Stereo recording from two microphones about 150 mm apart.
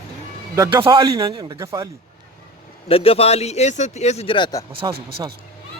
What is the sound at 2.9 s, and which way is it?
A man's voice, 40° left (ahead or behind).